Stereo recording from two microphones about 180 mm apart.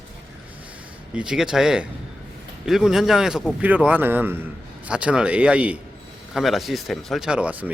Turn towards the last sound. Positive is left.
turn(degrees=-10)  # may be behind; listen again after turning